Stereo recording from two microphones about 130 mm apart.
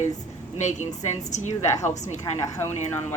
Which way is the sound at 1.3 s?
65° left (ahead or behind).